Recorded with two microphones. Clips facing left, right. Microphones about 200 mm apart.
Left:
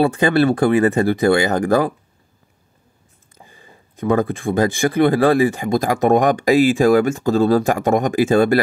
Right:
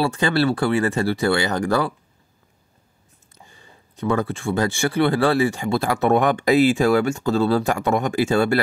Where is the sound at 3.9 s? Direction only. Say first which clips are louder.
Left 4 dB; 50° left (ahead or behind).